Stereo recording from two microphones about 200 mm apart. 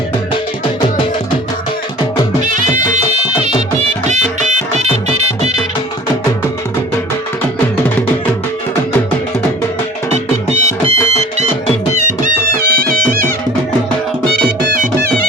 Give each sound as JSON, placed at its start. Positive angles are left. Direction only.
{"t": 2.5, "sound": "music", "side_deg": -40}
{"t": 4.0, "sound": "music", "side_deg": -35}
{"t": 10.5, "sound": "music", "side_deg": -35}
{"t": 12.2, "sound": "music", "side_deg": -50}